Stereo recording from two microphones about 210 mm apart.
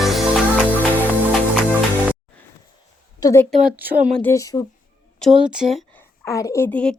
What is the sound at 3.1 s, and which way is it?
Speech, 15° left (ahead or behind).